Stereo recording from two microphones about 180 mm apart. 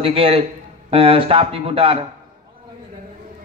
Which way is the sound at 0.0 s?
30° right (ahead or behind).